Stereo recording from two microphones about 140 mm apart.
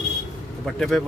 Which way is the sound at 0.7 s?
Centre (ahead or behind).